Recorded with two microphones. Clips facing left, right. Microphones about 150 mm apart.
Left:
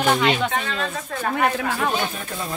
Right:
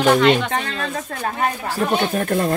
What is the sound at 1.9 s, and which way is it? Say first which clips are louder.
Speech: right 8 dB; 55° right (ahead or behind).